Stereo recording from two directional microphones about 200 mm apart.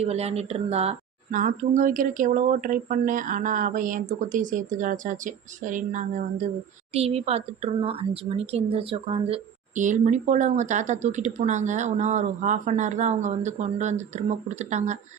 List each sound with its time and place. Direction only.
0.0 s speech: 30° right (ahead or behind)